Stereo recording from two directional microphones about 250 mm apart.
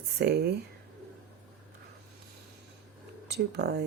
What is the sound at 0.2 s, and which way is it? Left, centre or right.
Speech, right.